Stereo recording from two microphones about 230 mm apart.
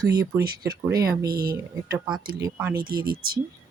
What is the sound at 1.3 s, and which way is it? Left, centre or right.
Speech, right.